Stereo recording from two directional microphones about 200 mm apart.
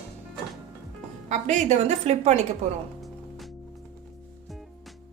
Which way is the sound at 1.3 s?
35° right (ahead or behind).